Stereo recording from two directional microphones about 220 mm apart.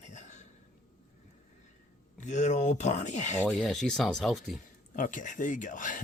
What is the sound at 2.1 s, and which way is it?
Speech, 35° left (ahead or behind).